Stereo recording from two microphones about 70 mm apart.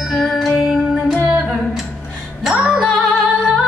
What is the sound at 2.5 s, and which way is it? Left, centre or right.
Music, centre.